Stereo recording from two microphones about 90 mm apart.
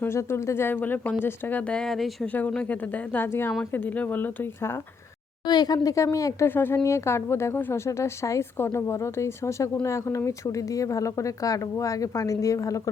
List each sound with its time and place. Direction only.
0.0 s a woman's voice: 30° left (ahead or behind)
1.8 s speech: 5° left (ahead or behind)
2.3 s a woman's voice: 15° left (ahead or behind)
5.5 s speech: 50° left (ahead or behind)
6.5 s a woman's voice: 25° left (ahead or behind)